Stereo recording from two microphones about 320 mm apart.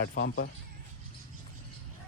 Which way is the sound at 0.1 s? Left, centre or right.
Left.